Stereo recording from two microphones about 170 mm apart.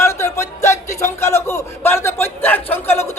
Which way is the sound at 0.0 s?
15° left (ahead or behind).